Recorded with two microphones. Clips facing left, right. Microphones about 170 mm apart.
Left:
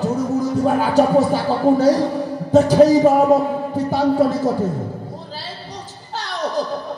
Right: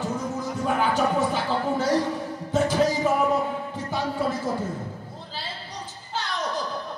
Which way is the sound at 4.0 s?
70° left (ahead or behind).